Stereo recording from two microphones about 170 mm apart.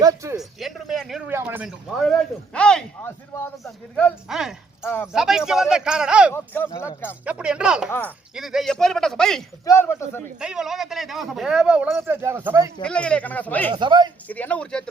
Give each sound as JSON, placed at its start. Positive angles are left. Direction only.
{"t": 0.0, "sound": "a sound", "side_deg": -20}
{"t": 0.3, "sound": "a sound", "side_deg": 0}
{"t": 1.3, "sound": "speech", "side_deg": -10}
{"t": 2.0, "sound": "a man's voice", "side_deg": 5}
{"t": 6.3, "sound": "speech", "side_deg": 10}
{"t": 7.3, "sound": "a man's voice", "side_deg": -5}
{"t": 7.9, "sound": "speech", "side_deg": 15}
{"t": 8.4, "sound": "a man's voice", "side_deg": 0}
{"t": 9.6, "sound": "speech", "side_deg": 15}
{"t": 10.4, "sound": "a man's voice", "side_deg": -5}
{"t": 12.8, "sound": "speech", "side_deg": 5}
{"t": 13.7, "sound": "speech", "side_deg": -25}
{"t": 14.3, "sound": "speech", "side_deg": 10}